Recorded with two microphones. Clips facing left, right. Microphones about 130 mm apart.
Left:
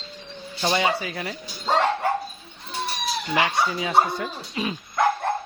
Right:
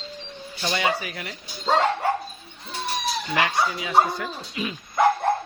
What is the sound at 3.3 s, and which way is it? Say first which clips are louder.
Speech: left 1 dB; 25° left (ahead or behind).